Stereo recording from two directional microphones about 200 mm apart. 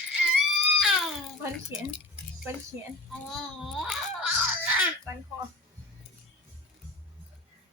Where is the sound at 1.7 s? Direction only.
15° right (ahead or behind).